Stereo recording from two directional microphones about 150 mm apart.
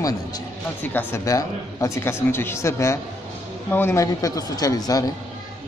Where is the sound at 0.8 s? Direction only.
15° left (ahead or behind).